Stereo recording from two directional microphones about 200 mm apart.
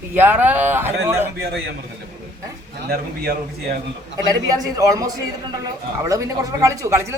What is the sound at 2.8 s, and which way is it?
Speech, 50° right (ahead or behind).